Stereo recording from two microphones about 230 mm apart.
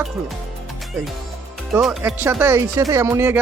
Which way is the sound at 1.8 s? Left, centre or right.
Centre.